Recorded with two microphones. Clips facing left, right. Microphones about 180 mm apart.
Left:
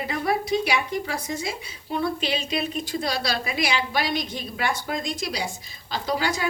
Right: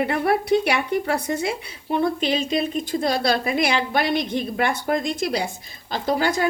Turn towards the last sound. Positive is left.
turn(degrees=-55)  # may be behind; listen again after turning